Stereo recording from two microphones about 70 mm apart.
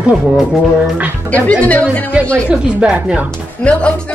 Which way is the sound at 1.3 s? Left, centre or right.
Left.